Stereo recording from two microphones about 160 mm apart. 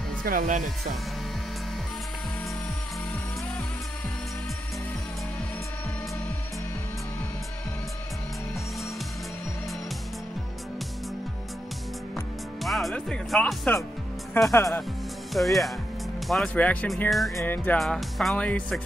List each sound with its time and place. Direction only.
0.2 s speech: 65° right (ahead or behind)
12.6 s speech: centre (ahead or behind)
14.5 s music: 15° left (ahead or behind)
15.3 s speech: centre (ahead or behind)
17.4 s music: 15° left (ahead or behind)
17.7 s speech: centre (ahead or behind)